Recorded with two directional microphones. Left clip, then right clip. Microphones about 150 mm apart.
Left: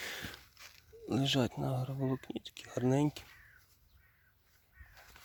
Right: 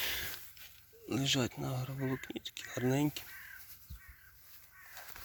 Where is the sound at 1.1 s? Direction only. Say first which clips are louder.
Left 1 dB; 55° left (ahead or behind).